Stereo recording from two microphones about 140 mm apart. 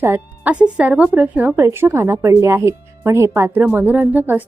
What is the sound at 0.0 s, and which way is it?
A woman's voice, 15° right (ahead or behind).